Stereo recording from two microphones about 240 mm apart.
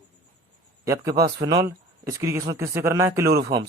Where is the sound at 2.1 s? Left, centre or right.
Centre.